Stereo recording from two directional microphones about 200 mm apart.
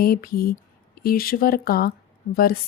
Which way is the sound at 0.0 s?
50° left (ahead or behind).